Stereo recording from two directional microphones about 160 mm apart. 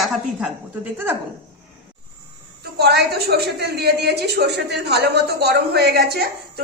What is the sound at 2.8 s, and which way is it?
A woman's voice, 85° right.